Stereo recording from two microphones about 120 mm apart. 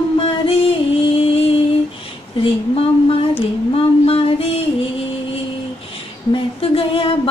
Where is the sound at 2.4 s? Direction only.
50° left (ahead or behind).